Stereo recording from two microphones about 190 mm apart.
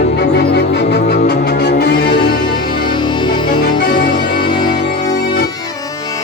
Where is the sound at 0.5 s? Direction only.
60° left (ahead or behind).